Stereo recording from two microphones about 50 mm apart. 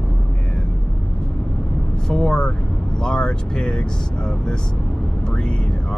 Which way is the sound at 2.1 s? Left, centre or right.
Centre.